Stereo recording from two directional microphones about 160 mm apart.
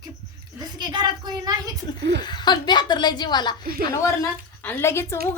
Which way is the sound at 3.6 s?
70° right (ahead or behind).